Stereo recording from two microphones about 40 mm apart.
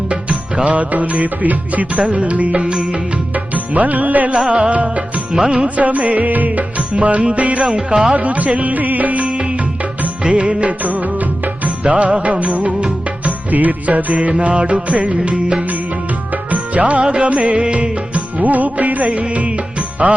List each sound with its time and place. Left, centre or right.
0.1 s music: right
4.4 s music: right
5.3 s music: right
7.6 s music: right
8.1 s music: right
9.2 s music: right
11.8 s music: right
16.3 s music: right
20.0 s music: right